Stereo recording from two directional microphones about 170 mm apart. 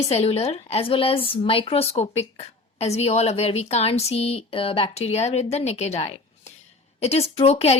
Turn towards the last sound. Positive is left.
turn(degrees=40)  # may be behind; listen again after turning